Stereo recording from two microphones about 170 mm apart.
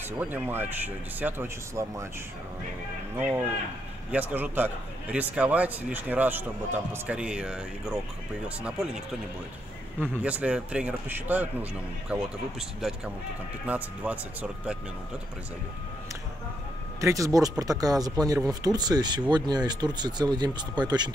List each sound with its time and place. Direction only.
0.2 s speech: 10° right (ahead or behind)
4.1 s speech: 10° right (ahead or behind)
10.0 s speech: 10° right (ahead or behind)
17.0 s speech: 20° right (ahead or behind)